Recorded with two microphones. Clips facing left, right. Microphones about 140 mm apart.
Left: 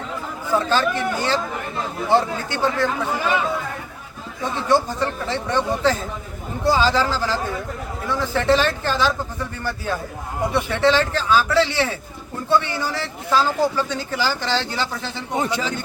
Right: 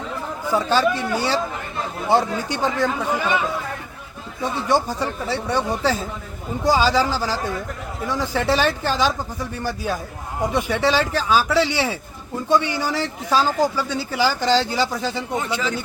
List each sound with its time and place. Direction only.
0.5 s a man's voice: 10° right (ahead or behind)
4.5 s a man's voice: 10° right (ahead or behind)
15.4 s speech: 35° left (ahead or behind)